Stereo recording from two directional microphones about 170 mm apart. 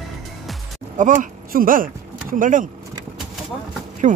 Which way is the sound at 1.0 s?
50° right (ahead or behind).